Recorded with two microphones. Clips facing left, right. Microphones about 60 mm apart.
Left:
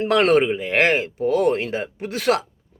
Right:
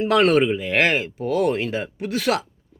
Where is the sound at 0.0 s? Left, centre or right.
Left.